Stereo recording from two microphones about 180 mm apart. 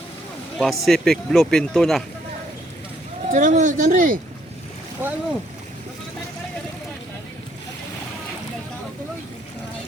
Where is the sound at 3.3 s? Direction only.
45° right (ahead or behind).